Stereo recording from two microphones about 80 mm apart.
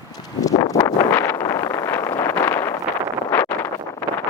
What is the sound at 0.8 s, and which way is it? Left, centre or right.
Wind noise, left.